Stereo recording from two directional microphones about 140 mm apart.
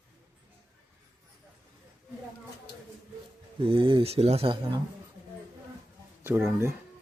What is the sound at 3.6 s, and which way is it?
Speech, 40° right (ahead or behind).